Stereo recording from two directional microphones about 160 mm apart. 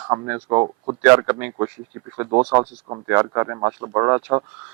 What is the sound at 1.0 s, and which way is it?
Speech, 15° right (ahead or behind).